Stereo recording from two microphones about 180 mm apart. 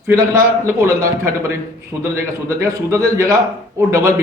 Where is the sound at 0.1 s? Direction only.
15° right (ahead or behind).